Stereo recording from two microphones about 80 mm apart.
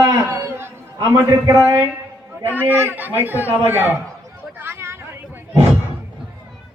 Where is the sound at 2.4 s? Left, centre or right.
Right.